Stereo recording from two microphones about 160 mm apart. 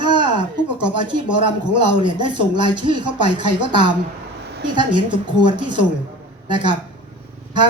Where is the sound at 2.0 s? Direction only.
30° right (ahead or behind).